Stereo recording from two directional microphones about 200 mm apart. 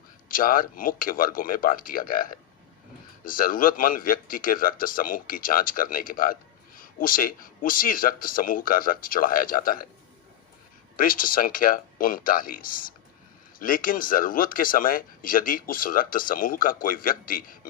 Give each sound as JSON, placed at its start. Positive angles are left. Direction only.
{"t": 0.3, "sound": "speech", "side_deg": 45}
{"t": 10.9, "sound": "speech", "side_deg": 45}